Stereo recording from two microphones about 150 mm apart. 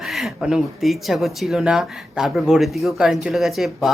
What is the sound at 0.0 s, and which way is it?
Speech, centre (ahead or behind).